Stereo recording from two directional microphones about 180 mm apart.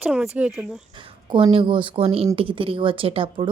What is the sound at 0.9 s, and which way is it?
A woman's voice, 30° right (ahead or behind).